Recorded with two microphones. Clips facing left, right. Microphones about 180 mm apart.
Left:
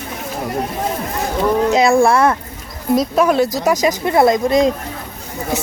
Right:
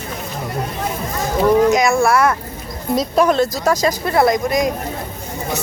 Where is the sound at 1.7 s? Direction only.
30° left (ahead or behind).